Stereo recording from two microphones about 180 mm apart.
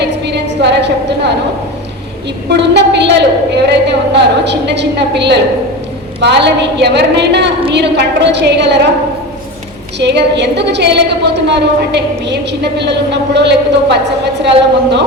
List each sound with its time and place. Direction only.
0.0 s a sound: 70° right (ahead or behind)
2.5 s a woman's voice: 70° right (ahead or behind)
10.0 s a woman's voice: 70° right (ahead or behind)